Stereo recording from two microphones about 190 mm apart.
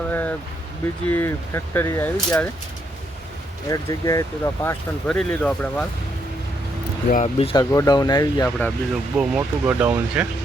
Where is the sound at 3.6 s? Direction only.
15° left (ahead or behind).